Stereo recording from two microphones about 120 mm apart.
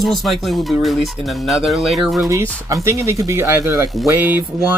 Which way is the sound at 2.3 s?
25° right (ahead or behind).